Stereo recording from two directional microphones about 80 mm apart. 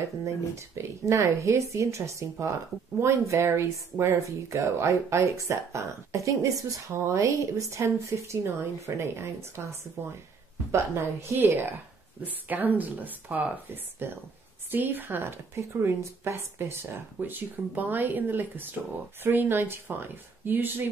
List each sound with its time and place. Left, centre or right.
0.2 s a woman's voice: right